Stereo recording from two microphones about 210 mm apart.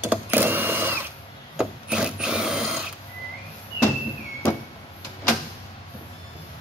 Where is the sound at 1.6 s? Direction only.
5° right (ahead or behind).